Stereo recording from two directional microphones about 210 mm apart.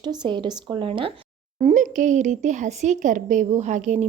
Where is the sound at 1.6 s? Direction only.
35° right (ahead or behind).